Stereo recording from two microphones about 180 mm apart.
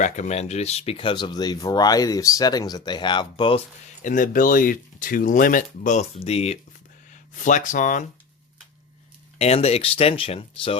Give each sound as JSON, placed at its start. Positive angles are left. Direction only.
{"t": 0.0, "sound": "speech", "side_deg": 40}
{"t": 4.0, "sound": "speech", "side_deg": 45}
{"t": 9.4, "sound": "speech", "side_deg": 35}